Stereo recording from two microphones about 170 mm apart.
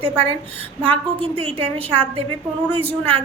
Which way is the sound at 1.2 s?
35° right (ahead or behind).